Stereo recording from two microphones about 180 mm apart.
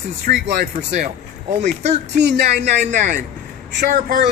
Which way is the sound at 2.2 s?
65° right (ahead or behind).